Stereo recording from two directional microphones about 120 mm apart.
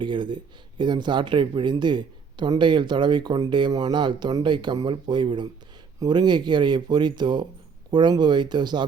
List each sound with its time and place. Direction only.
0.0 s speech: 40° right (ahead or behind)